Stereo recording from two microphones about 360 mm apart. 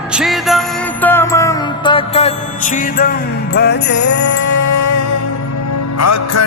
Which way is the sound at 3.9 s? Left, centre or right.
Left.